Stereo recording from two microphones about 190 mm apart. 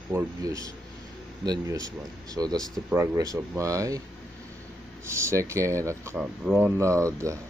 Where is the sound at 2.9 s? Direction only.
15° right (ahead or behind).